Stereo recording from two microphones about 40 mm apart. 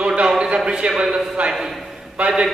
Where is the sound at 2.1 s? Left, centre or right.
Right.